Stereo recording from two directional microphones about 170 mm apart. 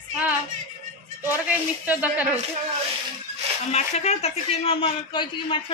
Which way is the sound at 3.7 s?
40° left (ahead or behind).